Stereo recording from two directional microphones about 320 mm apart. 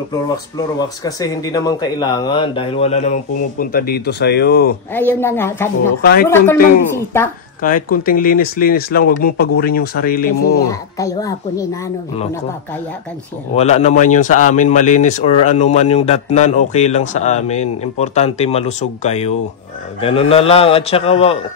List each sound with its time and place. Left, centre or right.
0.7 s speech: centre; by 4.7 s left
4.9 s speech: centre
7.6 s speech: left
10.6 s speech: centre
13.6 s speech: centre